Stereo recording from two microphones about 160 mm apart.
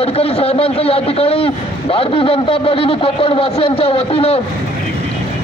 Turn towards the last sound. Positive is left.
turn(degrees=35)  # may be behind; listen again after turning